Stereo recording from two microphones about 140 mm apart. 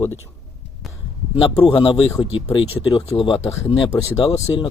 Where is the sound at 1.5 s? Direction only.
40° left (ahead or behind).